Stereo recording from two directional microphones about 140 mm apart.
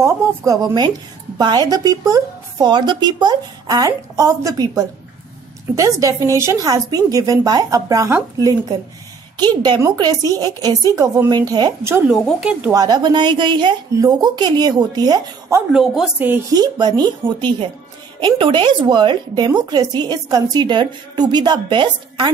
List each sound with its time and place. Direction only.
0.0 s speech: 25° right (ahead or behind)
12.1 s speech: 5° right (ahead or behind)
12.7 s a woman's voice: 30° right (ahead or behind)
15.7 s speech: 5° right (ahead or behind)
16.5 s speech: 30° right (ahead or behind)
18.2 s a woman's voice: 35° right (ahead or behind)